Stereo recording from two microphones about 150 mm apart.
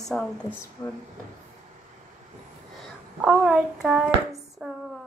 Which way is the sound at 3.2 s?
5° right (ahead or behind).